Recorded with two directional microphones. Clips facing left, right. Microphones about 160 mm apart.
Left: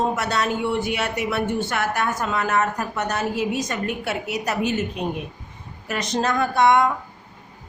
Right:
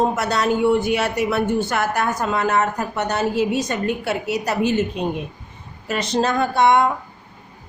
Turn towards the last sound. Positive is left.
turn(degrees=-30)  # may be behind; listen again after turning